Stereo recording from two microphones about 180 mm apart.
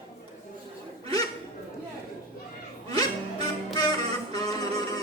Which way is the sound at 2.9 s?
20° left (ahead or behind).